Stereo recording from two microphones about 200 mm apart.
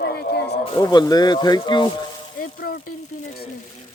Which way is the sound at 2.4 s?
50° left (ahead or behind).